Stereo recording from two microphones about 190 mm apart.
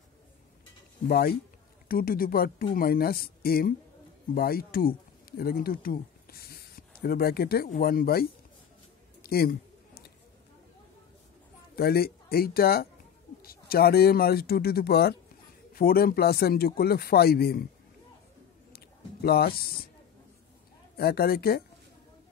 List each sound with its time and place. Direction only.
1.0 s speech: 50° left (ahead or behind)
9.2 s a sound: 50° left (ahead or behind)
11.7 s speech: 55° left (ahead or behind)
19.2 s speech: 55° left (ahead or behind)
20.9 s speech: 55° left (ahead or behind)